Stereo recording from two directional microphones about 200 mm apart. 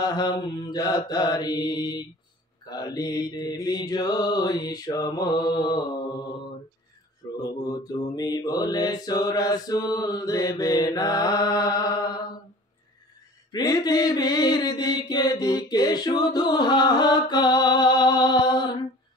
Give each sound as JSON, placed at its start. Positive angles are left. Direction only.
{"t": 0.0, "sound": "mantra", "side_deg": 20}
{"t": 7.4, "sound": "mantra", "side_deg": 20}
{"t": 13.5, "sound": "mantra", "side_deg": 20}